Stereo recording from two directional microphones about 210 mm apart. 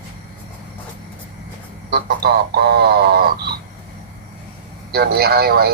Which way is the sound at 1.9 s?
50° right (ahead or behind).